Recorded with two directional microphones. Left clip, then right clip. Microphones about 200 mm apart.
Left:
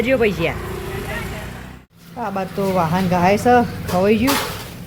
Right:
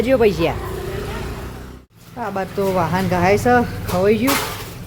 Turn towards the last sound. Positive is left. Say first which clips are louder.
# even
turn(degrees=0)  # may be behind; listen again after turning